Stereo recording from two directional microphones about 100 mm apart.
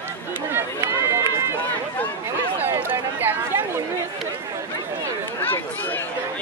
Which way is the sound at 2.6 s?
25° right (ahead or behind).